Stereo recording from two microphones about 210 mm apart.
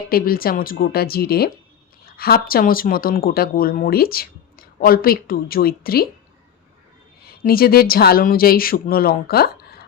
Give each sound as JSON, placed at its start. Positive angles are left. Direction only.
{"t": 0.1, "sound": "speech", "side_deg": 45}
{"t": 7.3, "sound": "speech", "side_deg": 45}